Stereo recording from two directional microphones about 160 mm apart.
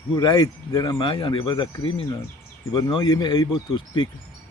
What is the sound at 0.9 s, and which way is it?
Speech, 30° left (ahead or behind).